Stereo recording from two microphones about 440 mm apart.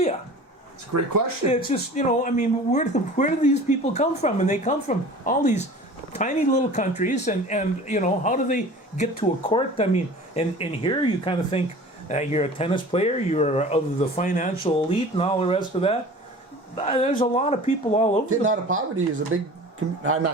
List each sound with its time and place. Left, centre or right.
0.9 s speech: right
1.5 s speech: centre
18.3 s speech: right